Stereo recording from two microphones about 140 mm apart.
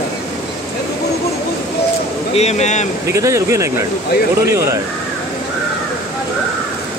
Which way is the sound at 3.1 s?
20° right (ahead or behind).